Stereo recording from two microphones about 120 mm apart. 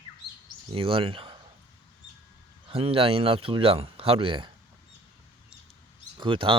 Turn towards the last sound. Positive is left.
turn(degrees=-45)  # may be behind; listen again after turning